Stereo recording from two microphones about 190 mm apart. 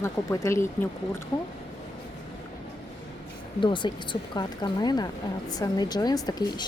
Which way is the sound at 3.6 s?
25° left (ahead or behind).